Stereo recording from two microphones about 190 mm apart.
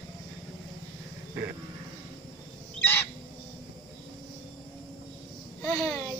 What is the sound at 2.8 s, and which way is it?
Bird, 10° left (ahead or behind).